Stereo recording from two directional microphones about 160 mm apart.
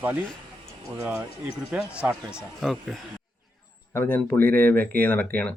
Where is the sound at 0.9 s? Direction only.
10° right (ahead or behind).